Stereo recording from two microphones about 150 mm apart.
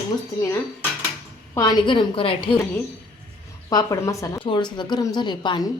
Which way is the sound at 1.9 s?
35° left (ahead or behind).